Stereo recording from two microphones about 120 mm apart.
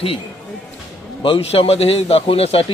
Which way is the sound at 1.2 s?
50° left (ahead or behind).